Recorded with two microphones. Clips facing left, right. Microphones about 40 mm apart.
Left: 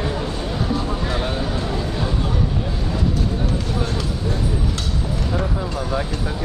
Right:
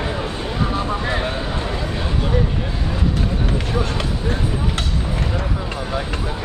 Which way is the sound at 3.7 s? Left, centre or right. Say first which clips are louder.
Right 2 dB; right.